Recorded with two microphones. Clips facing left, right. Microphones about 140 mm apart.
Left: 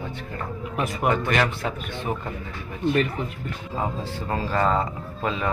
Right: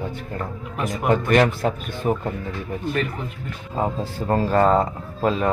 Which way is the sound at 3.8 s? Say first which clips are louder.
Right 5 dB; 45° right (ahead or behind).